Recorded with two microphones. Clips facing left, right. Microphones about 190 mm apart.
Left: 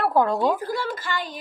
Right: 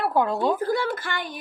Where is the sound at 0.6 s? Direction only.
55° right (ahead or behind).